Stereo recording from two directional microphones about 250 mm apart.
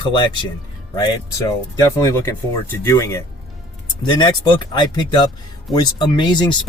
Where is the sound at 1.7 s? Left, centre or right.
Centre.